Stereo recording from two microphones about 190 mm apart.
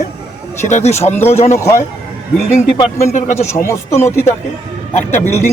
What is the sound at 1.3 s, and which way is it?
Speech, 35° left (ahead or behind).